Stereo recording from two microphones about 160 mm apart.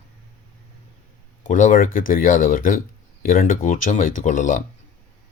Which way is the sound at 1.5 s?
55° left (ahead or behind).